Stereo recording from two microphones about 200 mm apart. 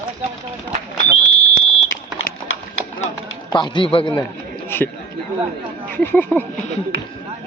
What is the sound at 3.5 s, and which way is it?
Speech, 20° left (ahead or behind).